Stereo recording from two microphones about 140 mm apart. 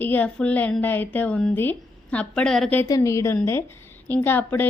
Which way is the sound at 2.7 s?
25° left (ahead or behind).